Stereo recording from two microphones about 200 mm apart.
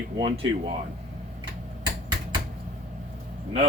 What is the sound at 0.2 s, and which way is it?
Speech, 30° right (ahead or behind).